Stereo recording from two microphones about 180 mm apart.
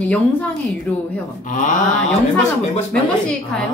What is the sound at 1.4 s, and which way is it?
Speech, 45° left (ahead or behind).